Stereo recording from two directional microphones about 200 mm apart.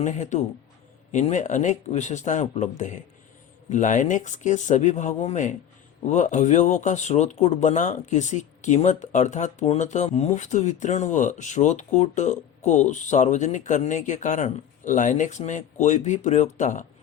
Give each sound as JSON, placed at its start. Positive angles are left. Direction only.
{"t": 0.0, "sound": "speech", "side_deg": 35}